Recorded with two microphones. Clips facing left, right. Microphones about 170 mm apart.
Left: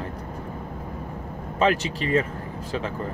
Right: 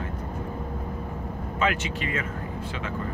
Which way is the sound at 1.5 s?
35° left (ahead or behind).